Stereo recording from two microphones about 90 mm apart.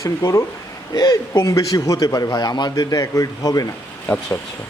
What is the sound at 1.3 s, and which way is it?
A man's voice, 35° left (ahead or behind).